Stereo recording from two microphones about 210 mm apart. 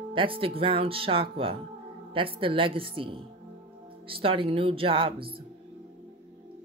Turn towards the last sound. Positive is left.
turn(degrees=-25)  # may be behind; listen again after turning